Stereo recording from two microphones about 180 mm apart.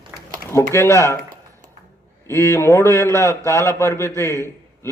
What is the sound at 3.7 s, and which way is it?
Speech, 15° left (ahead or behind).